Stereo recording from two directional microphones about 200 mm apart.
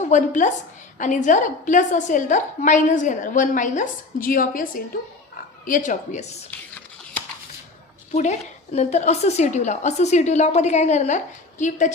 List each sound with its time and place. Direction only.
0.0 s a woman's voice: 35° left (ahead or behind)
5.6 s a woman's voice: 40° left (ahead or behind)
8.1 s a woman's voice: 35° left (ahead or behind)